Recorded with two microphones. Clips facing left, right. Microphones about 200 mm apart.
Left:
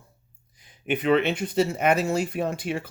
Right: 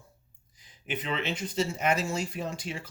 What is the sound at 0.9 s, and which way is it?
Speech, 60° left (ahead or behind).